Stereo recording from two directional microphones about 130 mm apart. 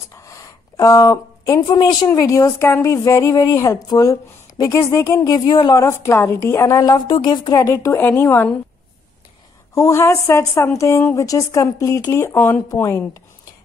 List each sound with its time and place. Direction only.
0.2 s a sound: 25° left (ahead or behind)
2.1 s speech: 25° left (ahead or behind)
5.9 s speech: 20° left (ahead or behind)
9.8 s speech: 20° left (ahead or behind)